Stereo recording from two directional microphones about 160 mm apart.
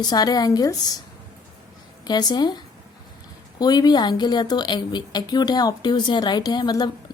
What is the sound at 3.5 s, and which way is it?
A woman's voice, 25° left (ahead or behind).